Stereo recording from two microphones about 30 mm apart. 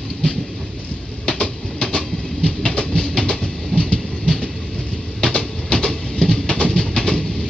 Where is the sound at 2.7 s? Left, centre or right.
Left.